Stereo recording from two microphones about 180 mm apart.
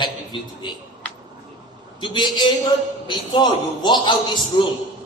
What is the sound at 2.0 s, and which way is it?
A man's voice, 25° left (ahead or behind).